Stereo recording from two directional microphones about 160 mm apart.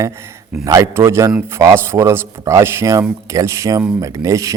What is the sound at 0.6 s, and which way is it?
A man's voice, 20° right (ahead or behind).